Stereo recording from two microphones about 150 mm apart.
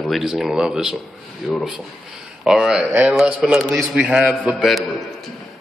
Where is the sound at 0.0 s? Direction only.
Centre (ahead or behind).